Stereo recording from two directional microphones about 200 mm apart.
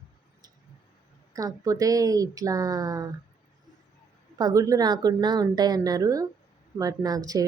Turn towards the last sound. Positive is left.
turn(degrees=-20)  # may be behind; listen again after turning